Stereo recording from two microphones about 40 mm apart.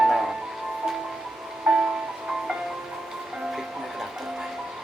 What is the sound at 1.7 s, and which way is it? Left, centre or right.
Music, centre.